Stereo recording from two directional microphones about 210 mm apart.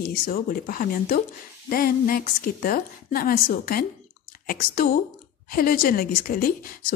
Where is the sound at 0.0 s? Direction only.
45° left (ahead or behind).